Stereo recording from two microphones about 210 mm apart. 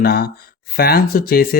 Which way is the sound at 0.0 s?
45° left (ahead or behind).